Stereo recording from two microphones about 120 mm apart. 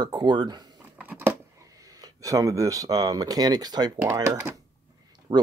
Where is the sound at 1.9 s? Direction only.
30° right (ahead or behind).